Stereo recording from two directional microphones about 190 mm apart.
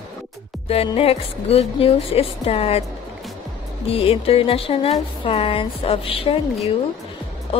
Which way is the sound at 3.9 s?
30° left (ahead or behind).